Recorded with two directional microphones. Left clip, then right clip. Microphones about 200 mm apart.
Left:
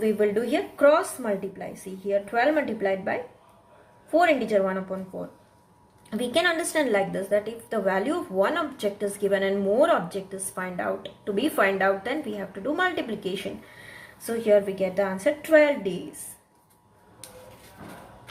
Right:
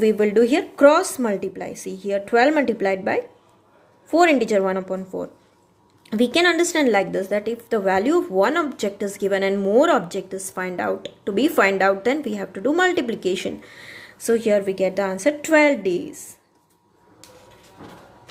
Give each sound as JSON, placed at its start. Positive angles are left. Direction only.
{"t": 0.0, "sound": "a woman's voice", "side_deg": -50}
{"t": 6.1, "sound": "a woman's voice", "side_deg": -45}